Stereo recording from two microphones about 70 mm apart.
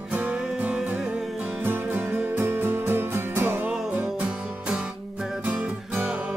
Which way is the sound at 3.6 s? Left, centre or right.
Right.